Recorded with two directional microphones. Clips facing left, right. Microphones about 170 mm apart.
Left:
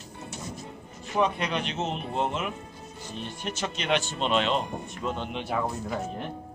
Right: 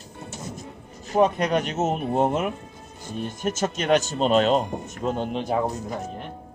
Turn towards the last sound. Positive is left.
turn(degrees=-40)  # may be behind; listen again after turning